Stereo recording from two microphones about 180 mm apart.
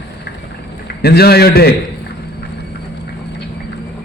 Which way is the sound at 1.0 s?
60° left (ahead or behind).